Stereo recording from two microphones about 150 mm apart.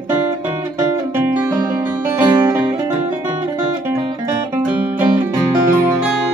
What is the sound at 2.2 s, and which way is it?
Music, 30° right (ahead or behind).